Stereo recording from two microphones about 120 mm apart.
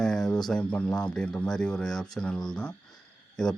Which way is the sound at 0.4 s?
10° left (ahead or behind).